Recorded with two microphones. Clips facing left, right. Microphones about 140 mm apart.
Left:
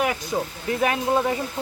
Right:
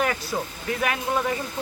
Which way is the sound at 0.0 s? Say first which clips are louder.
Left 2 dB; 10° left (ahead or behind).